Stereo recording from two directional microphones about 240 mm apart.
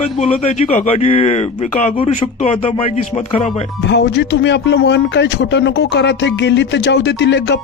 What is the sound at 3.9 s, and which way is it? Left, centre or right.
Speech, left.